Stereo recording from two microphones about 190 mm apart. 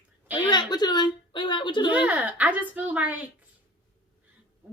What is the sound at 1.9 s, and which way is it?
Speech, 10° right (ahead or behind).